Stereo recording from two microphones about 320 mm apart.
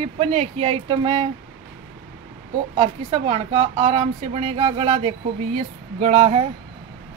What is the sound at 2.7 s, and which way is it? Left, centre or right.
Speech, centre.